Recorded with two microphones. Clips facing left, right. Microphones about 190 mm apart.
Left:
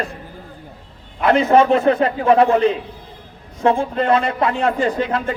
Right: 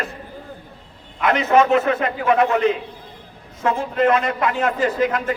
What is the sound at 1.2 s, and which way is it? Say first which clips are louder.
A man's voice: left 3 dB; 30° left (ahead or behind).